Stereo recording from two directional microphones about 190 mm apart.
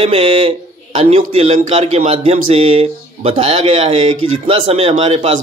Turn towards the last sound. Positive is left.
turn(degrees=-30)  # may be behind; listen again after turning